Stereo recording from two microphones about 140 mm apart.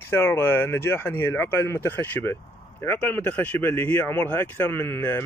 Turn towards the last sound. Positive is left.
turn(degrees=15)  # may be behind; listen again after turning